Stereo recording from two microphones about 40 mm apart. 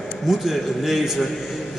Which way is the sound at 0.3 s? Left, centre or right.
Centre.